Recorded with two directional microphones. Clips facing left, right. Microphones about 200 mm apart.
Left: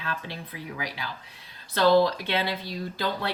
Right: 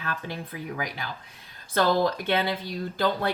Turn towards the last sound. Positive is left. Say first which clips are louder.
# right 4 dB
turn(degrees=-50)  # may be behind; listen again after turning